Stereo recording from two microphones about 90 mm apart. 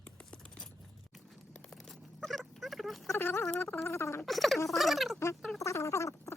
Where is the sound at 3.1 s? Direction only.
25° left (ahead or behind).